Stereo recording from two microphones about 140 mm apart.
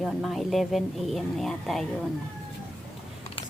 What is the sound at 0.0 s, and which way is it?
Speech, centre (ahead or behind).